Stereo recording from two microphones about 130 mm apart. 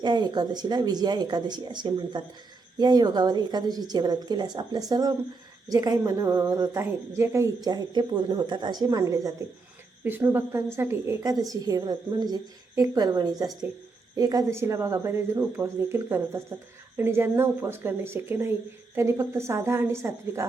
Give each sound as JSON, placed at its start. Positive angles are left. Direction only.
{"t": 0.0, "sound": "a woman's voice", "side_deg": -35}